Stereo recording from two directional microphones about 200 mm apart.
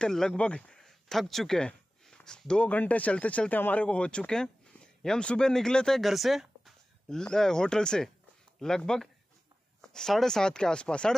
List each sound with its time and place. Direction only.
0.0 s speech: 5° left (ahead or behind)